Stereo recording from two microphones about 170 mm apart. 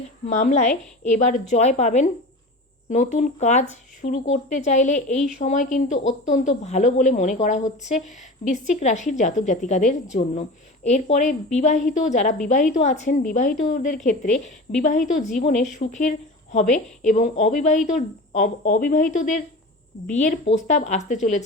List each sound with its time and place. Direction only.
0.3 s a woman's voice: 45° left (ahead or behind)